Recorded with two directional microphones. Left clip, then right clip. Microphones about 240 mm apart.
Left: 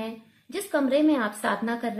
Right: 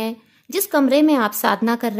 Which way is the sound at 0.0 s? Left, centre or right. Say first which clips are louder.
Right 9 dB; right.